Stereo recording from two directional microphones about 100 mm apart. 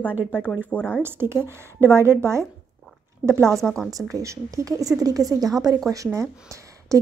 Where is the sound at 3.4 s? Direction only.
5° left (ahead or behind).